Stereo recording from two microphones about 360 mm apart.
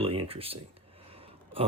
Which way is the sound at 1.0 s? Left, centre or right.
Centre.